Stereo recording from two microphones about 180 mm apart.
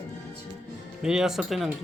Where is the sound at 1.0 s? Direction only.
5° right (ahead or behind).